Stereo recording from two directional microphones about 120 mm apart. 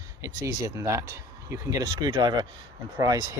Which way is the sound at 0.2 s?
25° right (ahead or behind).